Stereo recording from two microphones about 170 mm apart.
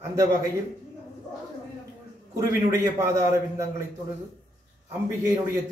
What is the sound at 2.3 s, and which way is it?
A man's voice, 15° right (ahead or behind).